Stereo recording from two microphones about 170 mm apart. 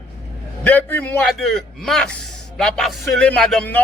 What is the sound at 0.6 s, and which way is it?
A man's voice, 10° left (ahead or behind).